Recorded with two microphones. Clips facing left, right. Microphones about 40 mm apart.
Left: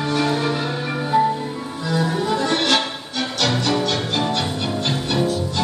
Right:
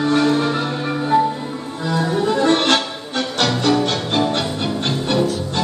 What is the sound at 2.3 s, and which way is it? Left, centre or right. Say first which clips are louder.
Music: right 7 dB; right.